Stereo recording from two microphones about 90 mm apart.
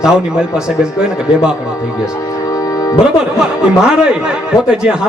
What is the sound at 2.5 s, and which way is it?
Music, 40° left (ahead or behind).